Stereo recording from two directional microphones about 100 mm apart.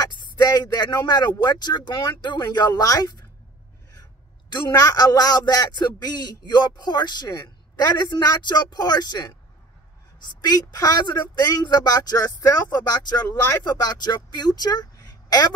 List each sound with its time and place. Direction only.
0.0 s a man's voice: 45° left (ahead or behind)